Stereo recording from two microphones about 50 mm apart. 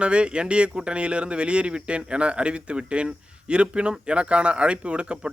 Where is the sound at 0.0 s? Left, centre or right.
Right.